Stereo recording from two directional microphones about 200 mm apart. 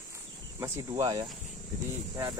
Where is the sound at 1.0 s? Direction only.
20° right (ahead or behind).